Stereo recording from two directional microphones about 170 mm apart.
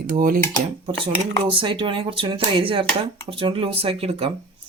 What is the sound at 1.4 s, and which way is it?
Speech, 30° right (ahead or behind).